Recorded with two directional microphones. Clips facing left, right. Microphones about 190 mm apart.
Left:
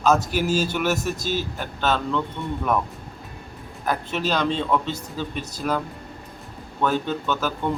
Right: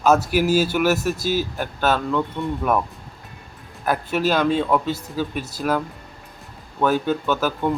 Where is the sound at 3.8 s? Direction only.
5° right (ahead or behind).